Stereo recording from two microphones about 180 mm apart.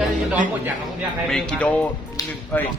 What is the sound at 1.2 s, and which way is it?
Speech, 5° left (ahead or behind).